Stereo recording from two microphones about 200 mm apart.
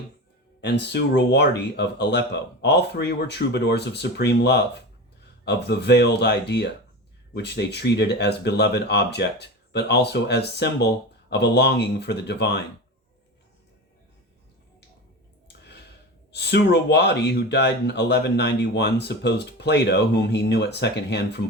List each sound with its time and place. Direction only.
0.6 s speech: 60° left (ahead or behind)
16.3 s speech: 60° left (ahead or behind)